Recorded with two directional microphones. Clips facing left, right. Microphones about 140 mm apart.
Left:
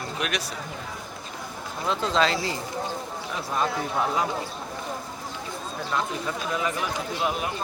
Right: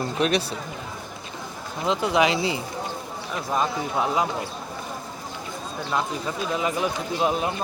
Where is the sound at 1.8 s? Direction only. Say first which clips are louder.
Right 3 dB; 15° right (ahead or behind).